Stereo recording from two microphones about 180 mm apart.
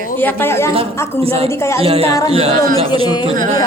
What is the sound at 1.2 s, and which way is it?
Speech, 30° right (ahead or behind).